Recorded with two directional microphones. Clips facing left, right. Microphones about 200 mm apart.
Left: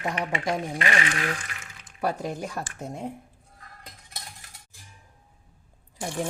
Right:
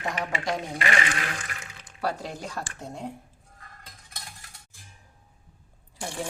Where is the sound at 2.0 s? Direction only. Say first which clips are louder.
Left 3 dB; 20° left (ahead or behind).